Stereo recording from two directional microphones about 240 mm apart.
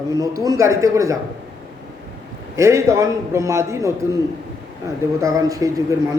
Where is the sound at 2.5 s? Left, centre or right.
Centre.